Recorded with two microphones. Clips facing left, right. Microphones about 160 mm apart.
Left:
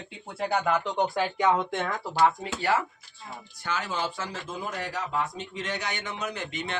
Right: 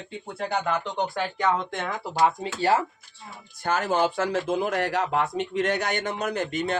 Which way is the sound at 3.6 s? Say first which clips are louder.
Right 8 dB; 50° right (ahead or behind).